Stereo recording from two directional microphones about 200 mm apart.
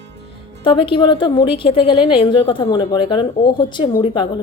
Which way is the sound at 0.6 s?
25° left (ahead or behind).